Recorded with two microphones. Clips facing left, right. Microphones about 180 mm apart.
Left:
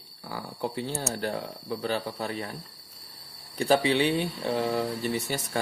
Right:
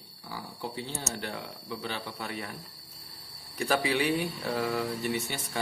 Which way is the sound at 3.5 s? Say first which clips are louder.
Left 5 dB; 30° left (ahead or behind).